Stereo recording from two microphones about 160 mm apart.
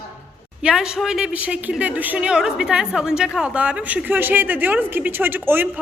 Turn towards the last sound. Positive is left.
turn(degrees=-10)  # may be behind; listen again after turning